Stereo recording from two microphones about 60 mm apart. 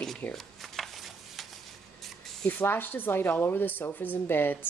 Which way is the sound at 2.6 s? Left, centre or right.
Left.